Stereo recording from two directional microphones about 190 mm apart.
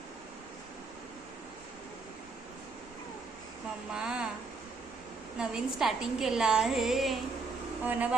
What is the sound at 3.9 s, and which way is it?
Speech, 5° right (ahead or behind).